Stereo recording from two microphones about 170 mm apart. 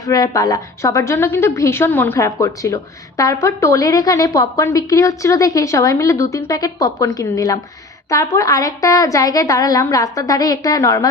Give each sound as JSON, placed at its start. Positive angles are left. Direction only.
{"t": 0.0, "sound": "a woman's voice", "side_deg": 20}